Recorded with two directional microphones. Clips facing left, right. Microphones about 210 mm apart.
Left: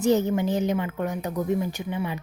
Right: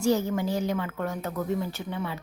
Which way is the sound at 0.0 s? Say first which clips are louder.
Left 3 dB; 20° left (ahead or behind).